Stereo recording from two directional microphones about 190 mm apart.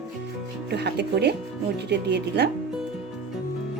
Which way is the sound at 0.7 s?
60° right (ahead or behind).